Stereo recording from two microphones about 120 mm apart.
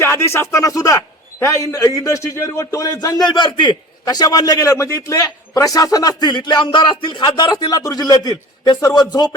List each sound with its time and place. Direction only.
0.0 s a man's voice: 20° left (ahead or behind)